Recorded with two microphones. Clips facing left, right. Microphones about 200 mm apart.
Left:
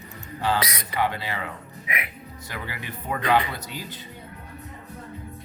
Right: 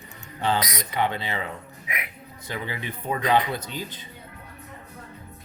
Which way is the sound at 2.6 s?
20° right (ahead or behind).